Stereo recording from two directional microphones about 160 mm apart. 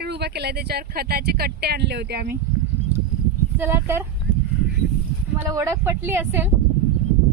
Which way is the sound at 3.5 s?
15° right (ahead or behind).